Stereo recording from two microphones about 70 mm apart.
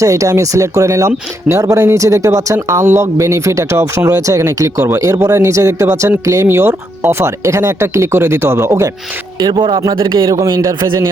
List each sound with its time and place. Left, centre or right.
0.0 s speech: right
9.4 s speech: right
10.1 s a man's voice: right